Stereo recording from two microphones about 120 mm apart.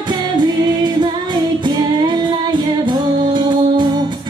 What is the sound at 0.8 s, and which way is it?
Female singing, 35° right (ahead or behind).